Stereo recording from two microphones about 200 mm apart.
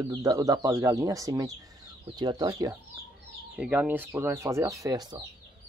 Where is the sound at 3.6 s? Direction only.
5° right (ahead or behind).